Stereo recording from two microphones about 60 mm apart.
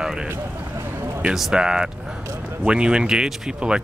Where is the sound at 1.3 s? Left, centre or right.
Centre.